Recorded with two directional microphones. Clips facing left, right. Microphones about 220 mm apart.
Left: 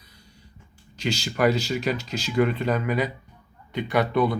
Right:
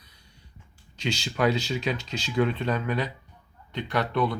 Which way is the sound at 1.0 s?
Centre (ahead or behind).